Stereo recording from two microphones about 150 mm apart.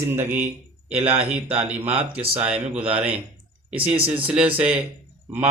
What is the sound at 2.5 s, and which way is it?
Speech, 10° right (ahead or behind).